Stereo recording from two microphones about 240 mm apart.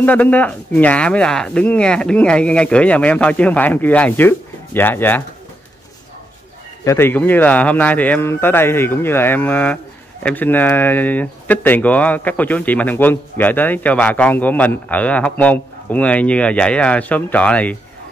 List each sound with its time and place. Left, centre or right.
0.0 s speech: centre
6.8 s speech: centre